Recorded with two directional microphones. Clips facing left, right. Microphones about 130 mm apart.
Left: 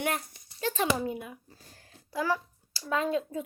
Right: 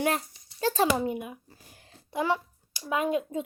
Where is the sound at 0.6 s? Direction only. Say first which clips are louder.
Right 5 dB; 35° right (ahead or behind).